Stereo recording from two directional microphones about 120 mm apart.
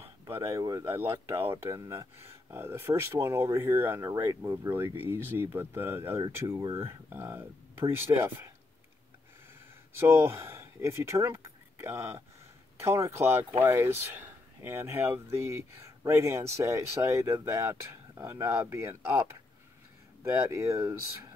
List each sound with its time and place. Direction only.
0.0 s speech: 20° right (ahead or behind)
9.9 s speech: 20° right (ahead or behind)
20.4 s speech: 25° right (ahead or behind)